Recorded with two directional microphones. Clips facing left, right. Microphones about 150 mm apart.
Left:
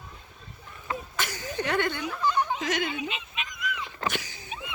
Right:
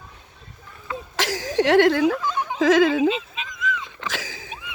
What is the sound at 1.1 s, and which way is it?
Chuckle, 90° right.